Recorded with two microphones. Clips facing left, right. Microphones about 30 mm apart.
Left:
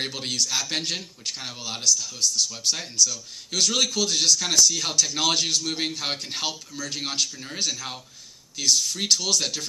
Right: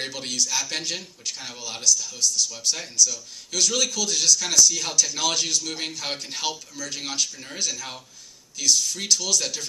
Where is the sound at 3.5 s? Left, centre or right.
Left.